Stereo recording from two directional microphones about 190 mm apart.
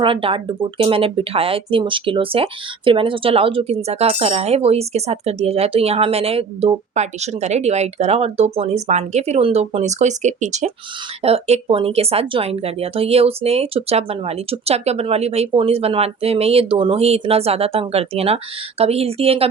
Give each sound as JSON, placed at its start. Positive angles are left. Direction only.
{"t": 0.0, "sound": "speech", "side_deg": -30}